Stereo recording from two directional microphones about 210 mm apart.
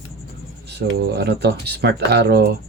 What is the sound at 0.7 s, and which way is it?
Speech, 50° right (ahead or behind).